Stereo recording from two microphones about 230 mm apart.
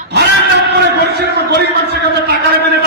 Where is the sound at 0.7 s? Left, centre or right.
Right.